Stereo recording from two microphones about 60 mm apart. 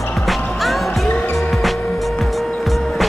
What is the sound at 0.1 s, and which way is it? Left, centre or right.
Music, centre.